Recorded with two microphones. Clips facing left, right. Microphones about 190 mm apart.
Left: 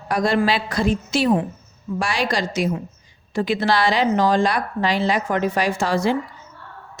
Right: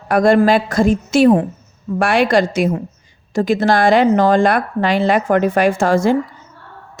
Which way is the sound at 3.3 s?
45° right (ahead or behind).